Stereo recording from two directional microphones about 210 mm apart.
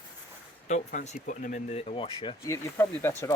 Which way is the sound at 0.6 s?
35° left (ahead or behind).